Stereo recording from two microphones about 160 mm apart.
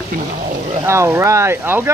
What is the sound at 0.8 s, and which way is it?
Speech, 15° right (ahead or behind).